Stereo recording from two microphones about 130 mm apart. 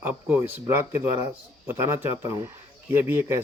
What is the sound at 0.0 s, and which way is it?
Speech, 15° right (ahead or behind).